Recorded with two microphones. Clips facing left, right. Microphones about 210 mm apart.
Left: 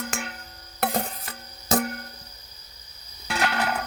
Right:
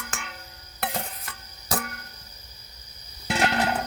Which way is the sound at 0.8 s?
45° left (ahead or behind).